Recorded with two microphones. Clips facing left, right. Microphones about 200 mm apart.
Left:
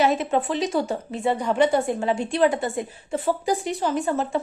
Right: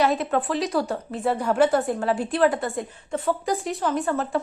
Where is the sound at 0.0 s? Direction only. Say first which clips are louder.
Left 1 dB; centre (ahead or behind).